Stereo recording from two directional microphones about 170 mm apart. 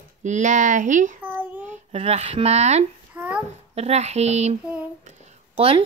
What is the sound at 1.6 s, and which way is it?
Speech, 40° right (ahead or behind).